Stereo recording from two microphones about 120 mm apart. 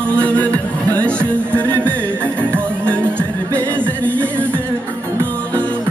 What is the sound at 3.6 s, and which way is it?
Music, 10° left (ahead or behind).